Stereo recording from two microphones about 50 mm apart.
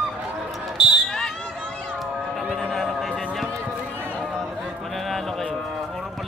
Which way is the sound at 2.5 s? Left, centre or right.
Centre.